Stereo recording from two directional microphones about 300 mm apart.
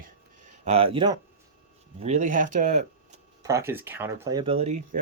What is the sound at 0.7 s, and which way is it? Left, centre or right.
Speech, centre.